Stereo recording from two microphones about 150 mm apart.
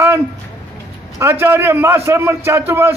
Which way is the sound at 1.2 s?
15° right (ahead or behind).